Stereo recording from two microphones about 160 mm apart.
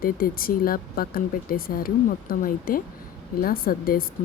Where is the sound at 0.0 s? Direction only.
65° left (ahead or behind).